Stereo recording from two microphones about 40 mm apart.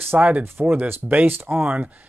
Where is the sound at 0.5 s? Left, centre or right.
Right.